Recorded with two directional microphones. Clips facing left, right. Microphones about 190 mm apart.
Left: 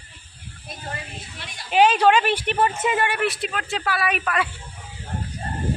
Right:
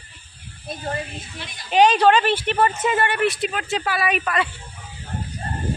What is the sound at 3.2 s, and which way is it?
A woman's voice, centre (ahead or behind).